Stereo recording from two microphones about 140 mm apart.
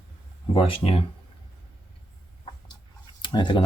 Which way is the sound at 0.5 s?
40° left (ahead or behind).